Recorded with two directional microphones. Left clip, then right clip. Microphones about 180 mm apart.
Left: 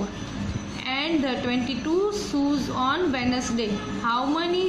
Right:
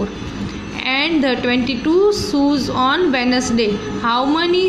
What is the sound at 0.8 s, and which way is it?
A woman's voice, 35° right (ahead or behind).